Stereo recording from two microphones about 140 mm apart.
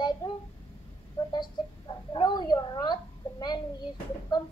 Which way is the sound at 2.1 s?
30° left (ahead or behind).